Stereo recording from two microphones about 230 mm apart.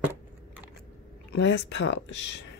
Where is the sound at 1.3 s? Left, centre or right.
Left.